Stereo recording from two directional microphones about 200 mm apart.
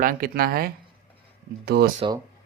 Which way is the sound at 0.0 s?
45° right (ahead or behind).